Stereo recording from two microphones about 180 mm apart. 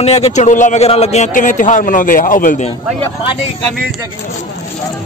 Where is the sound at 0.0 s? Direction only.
35° left (ahead or behind).